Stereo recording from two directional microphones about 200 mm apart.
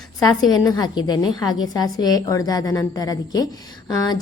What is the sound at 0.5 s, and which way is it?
A woman's voice, 20° left (ahead or behind).